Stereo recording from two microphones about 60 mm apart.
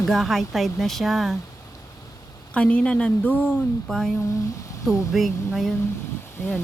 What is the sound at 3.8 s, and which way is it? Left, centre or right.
Speech, centre.